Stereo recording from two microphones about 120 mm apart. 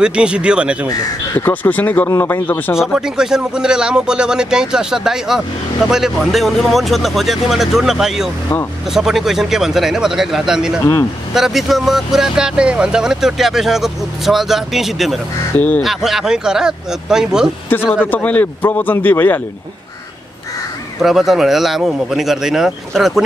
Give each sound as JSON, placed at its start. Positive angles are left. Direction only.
{"t": 0.0, "sound": "speech", "side_deg": -10}
{"t": 0.8, "sound": "a man's voice", "side_deg": 20}
{"t": 2.7, "sound": "speech", "side_deg": -5}
{"t": 18.1, "sound": "a man's voice", "side_deg": 15}
{"t": 21.0, "sound": "speech", "side_deg": 0}